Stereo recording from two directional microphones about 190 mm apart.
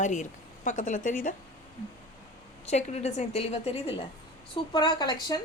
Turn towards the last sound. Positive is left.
turn(degrees=20)  # may be behind; listen again after turning